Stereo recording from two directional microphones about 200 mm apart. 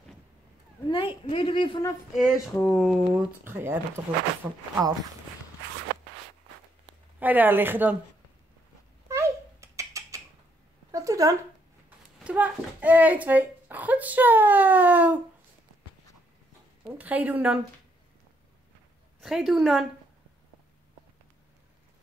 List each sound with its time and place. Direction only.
0.8 s a woman's voice: 25° left (ahead or behind)
2.1 s speech: centre (ahead or behind)
3.4 s a child's voice: 10° right (ahead or behind)
7.2 s a child's voice: 10° right (ahead or behind)
9.1 s a sound: 15° right (ahead or behind)
12.2 s a child's voice: 5° right (ahead or behind)
17.0 s a child's voice: 10° right (ahead or behind)
19.2 s speech: centre (ahead or behind)